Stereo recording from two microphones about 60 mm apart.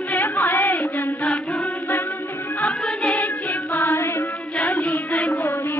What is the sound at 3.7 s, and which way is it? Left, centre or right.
Music, left.